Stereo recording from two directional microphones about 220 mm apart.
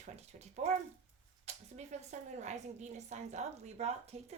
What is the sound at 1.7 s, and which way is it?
A woman's voice, 30° right (ahead or behind).